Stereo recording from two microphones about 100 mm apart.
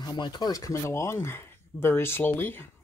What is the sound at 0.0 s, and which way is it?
Speech, 45° left (ahead or behind).